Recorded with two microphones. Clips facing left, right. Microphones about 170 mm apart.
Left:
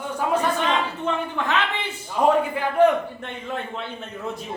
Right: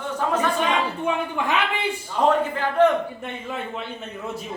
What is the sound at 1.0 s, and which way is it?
Speech, 10° right (ahead or behind).